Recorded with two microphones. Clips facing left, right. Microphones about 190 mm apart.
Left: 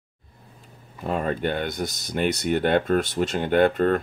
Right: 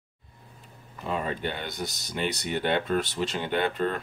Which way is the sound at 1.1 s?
50° left (ahead or behind).